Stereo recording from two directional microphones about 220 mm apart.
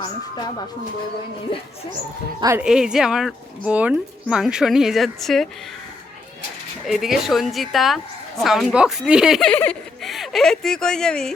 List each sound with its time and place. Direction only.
0.0 s speech: 20° left (ahead or behind)
2.4 s speech: 15° right (ahead or behind)
2.6 s speech: 5° right (ahead or behind)
6.8 s speech: centre (ahead or behind)